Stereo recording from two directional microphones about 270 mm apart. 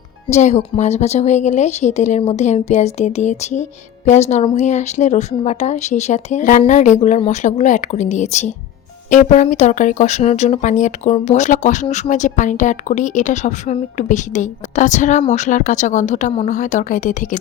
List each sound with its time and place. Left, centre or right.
0.3 s a woman's voice: left